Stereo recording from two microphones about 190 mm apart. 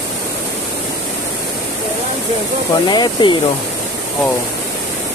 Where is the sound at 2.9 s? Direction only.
25° left (ahead or behind).